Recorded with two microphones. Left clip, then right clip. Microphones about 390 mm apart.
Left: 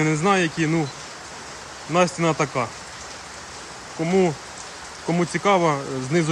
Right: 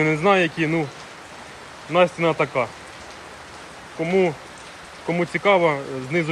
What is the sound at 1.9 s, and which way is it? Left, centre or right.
Speech, centre.